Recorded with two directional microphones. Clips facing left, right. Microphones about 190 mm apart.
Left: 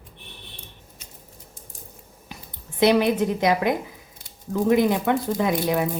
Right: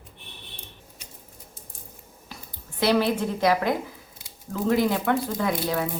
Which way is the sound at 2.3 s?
20° left (ahead or behind).